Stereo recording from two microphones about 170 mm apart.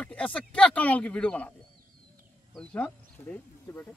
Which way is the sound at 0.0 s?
10° left (ahead or behind).